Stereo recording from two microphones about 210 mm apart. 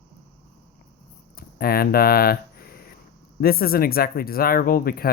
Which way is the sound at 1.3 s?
45° left (ahead or behind).